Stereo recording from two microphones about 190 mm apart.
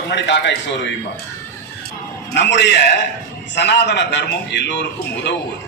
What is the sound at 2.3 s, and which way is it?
A man's voice, 65° left (ahead or behind).